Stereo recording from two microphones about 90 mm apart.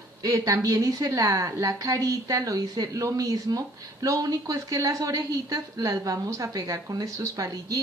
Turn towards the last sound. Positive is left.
turn(degrees=-40)  # may be behind; listen again after turning